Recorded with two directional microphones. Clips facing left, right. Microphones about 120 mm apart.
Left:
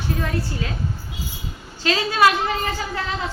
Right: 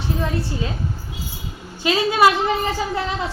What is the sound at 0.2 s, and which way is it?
Speech, 20° right (ahead or behind).